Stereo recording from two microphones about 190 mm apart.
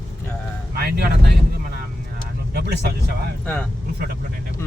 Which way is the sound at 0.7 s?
55° right (ahead or behind).